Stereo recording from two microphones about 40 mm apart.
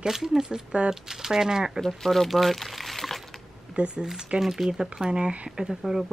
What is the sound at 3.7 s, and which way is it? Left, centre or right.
Speech, right.